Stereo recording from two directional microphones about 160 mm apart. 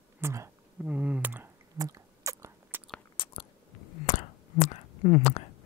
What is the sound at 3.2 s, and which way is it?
Biting, 35° left (ahead or behind).